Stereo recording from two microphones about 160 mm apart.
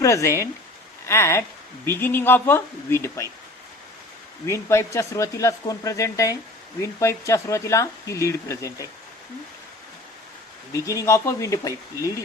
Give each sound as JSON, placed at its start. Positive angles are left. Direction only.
{"t": 0.0, "sound": "speech", "side_deg": 20}
{"t": 4.4, "sound": "speech", "side_deg": 15}
{"t": 10.8, "sound": "speech", "side_deg": 20}